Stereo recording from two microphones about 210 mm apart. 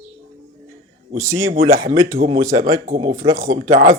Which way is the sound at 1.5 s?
40° right (ahead or behind).